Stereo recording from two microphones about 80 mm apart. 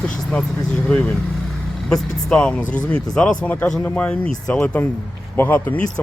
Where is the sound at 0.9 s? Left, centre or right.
Centre.